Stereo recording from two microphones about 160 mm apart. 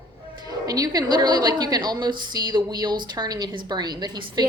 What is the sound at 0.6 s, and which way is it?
A woman's voice, 20° right (ahead or behind).